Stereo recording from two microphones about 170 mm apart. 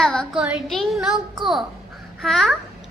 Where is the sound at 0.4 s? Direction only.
Centre (ahead or behind).